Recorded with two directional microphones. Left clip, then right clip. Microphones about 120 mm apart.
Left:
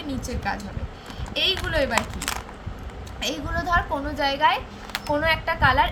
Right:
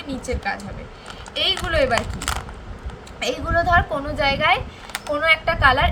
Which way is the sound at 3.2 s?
30° right (ahead or behind).